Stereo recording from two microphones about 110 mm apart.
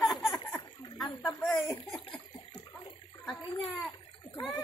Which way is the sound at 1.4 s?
25° left (ahead or behind).